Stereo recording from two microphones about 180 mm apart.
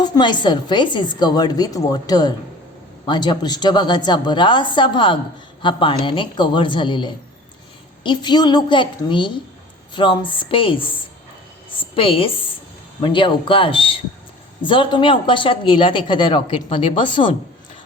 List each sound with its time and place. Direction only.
0.0 s a woman's voice: 25° left (ahead or behind)
11.7 s a sound: 30° left (ahead or behind)
13.0 s a woman's voice: 25° left (ahead or behind)